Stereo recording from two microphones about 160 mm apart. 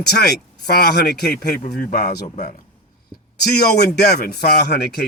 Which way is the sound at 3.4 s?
85° left.